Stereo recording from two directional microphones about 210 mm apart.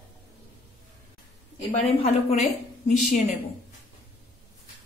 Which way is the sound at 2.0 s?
30° left (ahead or behind).